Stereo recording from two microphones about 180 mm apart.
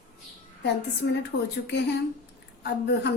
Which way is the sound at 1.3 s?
90° left.